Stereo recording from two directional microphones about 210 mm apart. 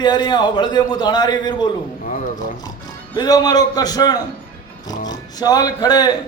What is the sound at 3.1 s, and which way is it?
A man's voice, 20° left (ahead or behind).